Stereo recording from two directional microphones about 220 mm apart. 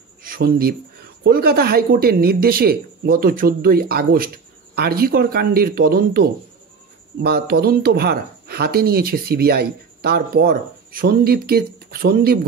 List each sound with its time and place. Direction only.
0.2 s speech: 40° right (ahead or behind)